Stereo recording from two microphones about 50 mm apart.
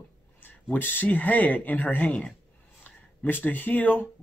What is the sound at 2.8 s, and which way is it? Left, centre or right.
Speech, left.